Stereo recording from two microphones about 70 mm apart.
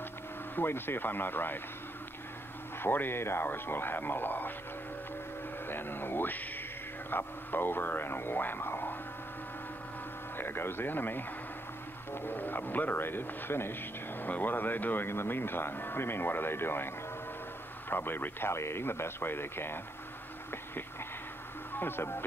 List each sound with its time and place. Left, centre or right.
0.6 s speech: left
2.8 s speech: left
5.7 s a sound: left
7.1 s speech: left
10.3 s speech: left
21.7 s speech: left